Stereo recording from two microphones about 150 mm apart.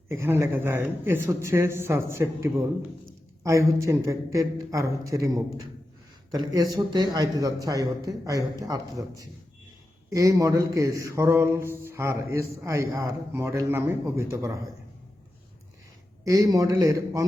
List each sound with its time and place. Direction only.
0.1 s speech: 20° right (ahead or behind)
3.4 s mantra: 20° right (ahead or behind)
16.2 s mantra: 20° right (ahead or behind)